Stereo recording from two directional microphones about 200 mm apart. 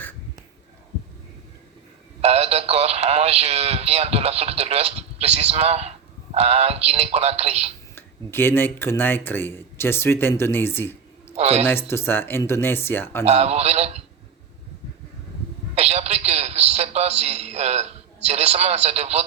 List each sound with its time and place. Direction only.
2.2 s speech: 30° right (ahead or behind)
7.9 s speech: 10° left (ahead or behind)
11.3 s speech: 35° right (ahead or behind)
11.6 s speech: 10° left (ahead or behind)
13.2 s speech: 30° right (ahead or behind)
15.7 s speech: 30° right (ahead or behind)